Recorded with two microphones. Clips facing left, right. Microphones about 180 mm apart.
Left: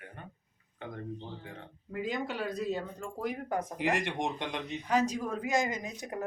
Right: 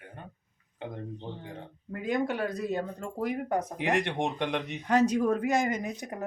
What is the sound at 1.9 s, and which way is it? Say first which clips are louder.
Speech: right 5 dB; 55° right (ahead or behind).